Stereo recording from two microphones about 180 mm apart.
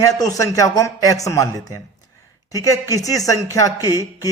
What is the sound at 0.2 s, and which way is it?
Speech, 20° left (ahead or behind).